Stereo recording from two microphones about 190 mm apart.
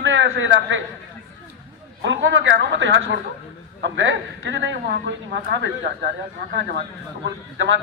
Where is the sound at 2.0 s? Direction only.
75° right (ahead or behind).